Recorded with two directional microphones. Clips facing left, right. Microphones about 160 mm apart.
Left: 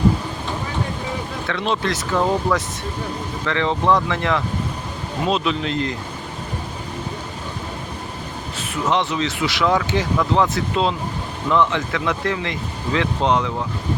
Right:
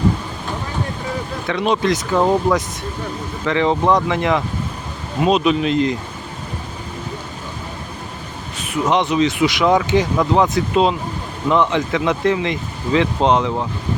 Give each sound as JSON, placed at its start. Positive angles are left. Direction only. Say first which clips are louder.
{"t": 1.5, "sound": "speech", "louder": "right 5 dB", "side_deg": -15}
{"t": 8.5, "sound": "speech", "louder": "right 3 dB", "side_deg": -15}